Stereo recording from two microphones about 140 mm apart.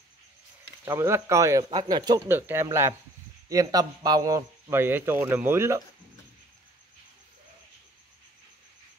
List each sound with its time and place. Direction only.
0.8 s a man's voice: 20° right (ahead or behind)
2.2 s a man's voice: 15° right (ahead or behind)